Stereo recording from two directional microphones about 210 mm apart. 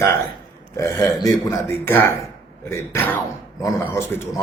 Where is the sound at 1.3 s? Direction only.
10° left (ahead or behind).